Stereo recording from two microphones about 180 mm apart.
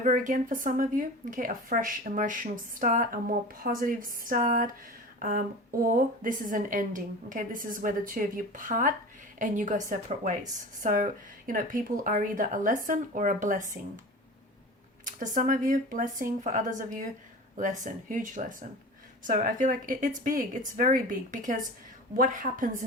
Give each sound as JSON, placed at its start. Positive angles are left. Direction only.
{"t": 0.0, "sound": "a woman's voice", "side_deg": -45}
{"t": 5.2, "sound": "a sound", "side_deg": -55}
{"t": 5.9, "sound": "a woman's voice", "side_deg": -50}
{"t": 15.2, "sound": "a woman's voice", "side_deg": -45}